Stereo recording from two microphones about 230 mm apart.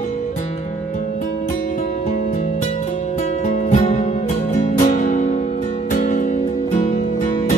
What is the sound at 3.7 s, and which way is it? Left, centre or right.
Music, left.